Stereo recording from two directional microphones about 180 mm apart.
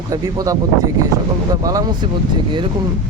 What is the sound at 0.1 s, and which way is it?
Speech, 20° right (ahead or behind).